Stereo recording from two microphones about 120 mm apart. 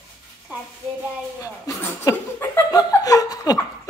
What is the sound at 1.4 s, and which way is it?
Laughter, 30° left (ahead or behind).